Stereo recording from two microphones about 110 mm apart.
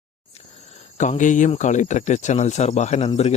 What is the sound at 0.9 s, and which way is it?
Speech, 90° left.